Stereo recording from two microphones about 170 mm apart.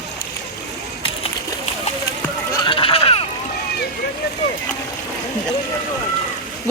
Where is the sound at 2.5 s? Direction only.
25° left (ahead or behind).